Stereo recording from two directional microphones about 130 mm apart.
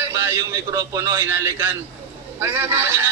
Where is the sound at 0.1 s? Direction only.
20° right (ahead or behind).